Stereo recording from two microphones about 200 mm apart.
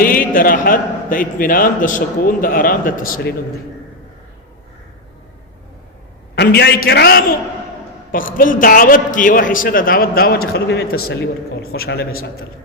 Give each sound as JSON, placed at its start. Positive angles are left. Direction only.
{"t": 0.0, "sound": "a man's voice", "side_deg": 45}
{"t": 6.3, "sound": "a man's voice", "side_deg": 55}
{"t": 8.4, "sound": "a man's voice", "side_deg": 45}